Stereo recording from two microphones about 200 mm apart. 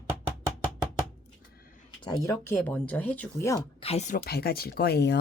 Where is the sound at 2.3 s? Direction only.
5° left (ahead or behind).